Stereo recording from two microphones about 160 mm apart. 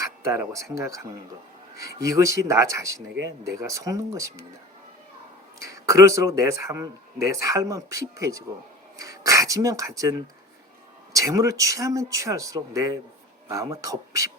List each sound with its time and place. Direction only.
0.0 s speech: 20° right (ahead or behind)
5.6 s speech: 20° right (ahead or behind)